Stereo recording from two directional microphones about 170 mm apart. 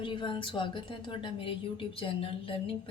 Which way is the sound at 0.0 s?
30° left (ahead or behind).